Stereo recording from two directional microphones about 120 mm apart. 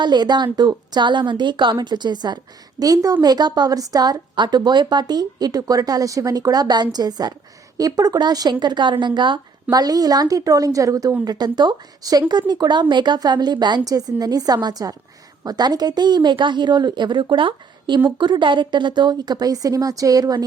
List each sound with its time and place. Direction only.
0.0 s a woman's voice: 35° right (ahead or behind)